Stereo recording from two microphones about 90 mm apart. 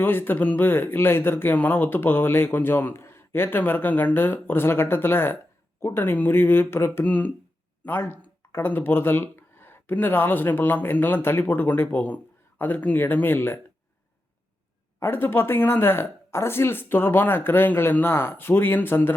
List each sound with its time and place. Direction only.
0.0 s speech: 25° left (ahead or behind)
14.9 s speech: 25° left (ahead or behind)